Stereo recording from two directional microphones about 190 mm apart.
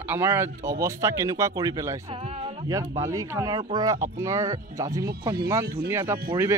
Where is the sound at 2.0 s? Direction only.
30° right (ahead or behind).